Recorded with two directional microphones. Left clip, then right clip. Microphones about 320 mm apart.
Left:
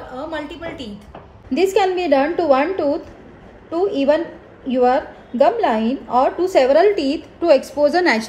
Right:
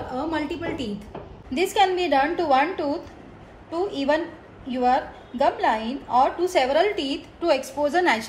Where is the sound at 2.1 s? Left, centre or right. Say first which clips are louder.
Left 5 dB; left.